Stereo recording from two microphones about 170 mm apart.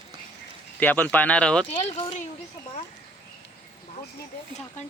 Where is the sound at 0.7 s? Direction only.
10° left (ahead or behind).